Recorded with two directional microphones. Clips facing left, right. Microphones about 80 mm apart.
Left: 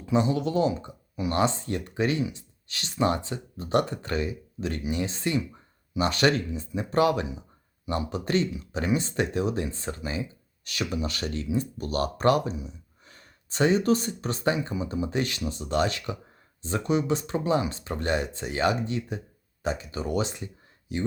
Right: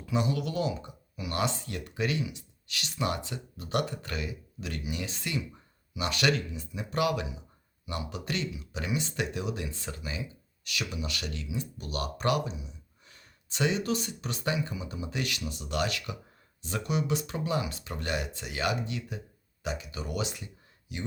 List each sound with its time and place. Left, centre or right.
0.0 s speech: left